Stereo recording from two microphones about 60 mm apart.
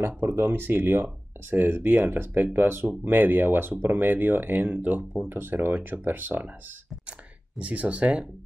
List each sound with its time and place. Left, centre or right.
0.0 s speech: right